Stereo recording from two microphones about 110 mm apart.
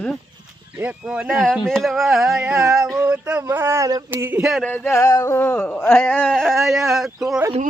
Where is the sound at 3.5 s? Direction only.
20° right (ahead or behind).